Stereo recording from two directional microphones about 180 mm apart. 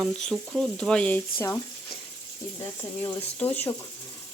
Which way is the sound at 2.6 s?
20° left (ahead or behind).